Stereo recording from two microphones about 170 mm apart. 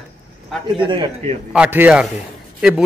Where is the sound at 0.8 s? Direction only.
30° right (ahead or behind).